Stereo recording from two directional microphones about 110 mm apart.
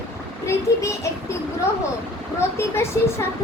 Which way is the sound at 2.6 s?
25° left (ahead or behind).